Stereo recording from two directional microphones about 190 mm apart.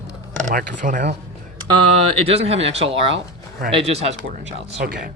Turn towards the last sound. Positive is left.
turn(degrees=-50)  # may be behind; listen again after turning